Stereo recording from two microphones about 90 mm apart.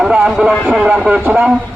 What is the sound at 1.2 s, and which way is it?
Speech, 20° right (ahead or behind).